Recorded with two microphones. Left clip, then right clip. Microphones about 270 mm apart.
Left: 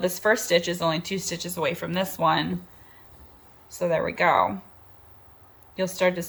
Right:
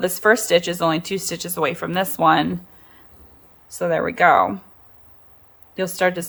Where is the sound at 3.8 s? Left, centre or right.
Centre.